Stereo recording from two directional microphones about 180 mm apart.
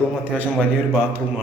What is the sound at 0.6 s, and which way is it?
Speech, 10° right (ahead or behind).